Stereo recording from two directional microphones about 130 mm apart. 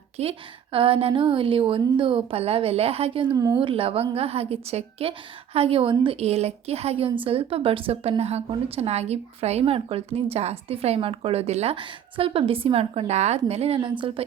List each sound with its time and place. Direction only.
0.2 s a woman's voice: 45° right (ahead or behind)
3.3 s speech: 30° right (ahead or behind)
3.6 s a woman's voice: 45° right (ahead or behind)